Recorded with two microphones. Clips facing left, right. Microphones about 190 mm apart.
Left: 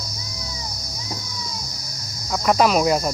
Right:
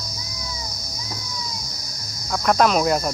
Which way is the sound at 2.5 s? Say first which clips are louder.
Left 1 dB; 5° left (ahead or behind).